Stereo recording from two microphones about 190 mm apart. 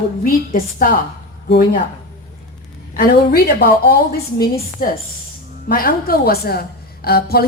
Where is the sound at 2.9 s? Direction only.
55° left (ahead or behind).